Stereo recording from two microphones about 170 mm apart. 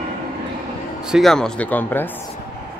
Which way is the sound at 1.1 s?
Centre (ahead or behind).